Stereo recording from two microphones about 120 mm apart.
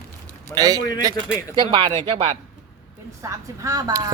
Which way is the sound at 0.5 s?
30° right (ahead or behind).